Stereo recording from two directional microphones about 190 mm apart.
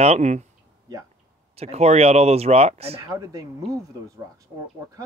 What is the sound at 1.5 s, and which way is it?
Speech, 35° right (ahead or behind).